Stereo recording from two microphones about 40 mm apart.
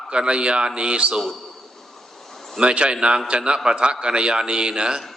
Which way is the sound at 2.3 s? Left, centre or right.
Centre.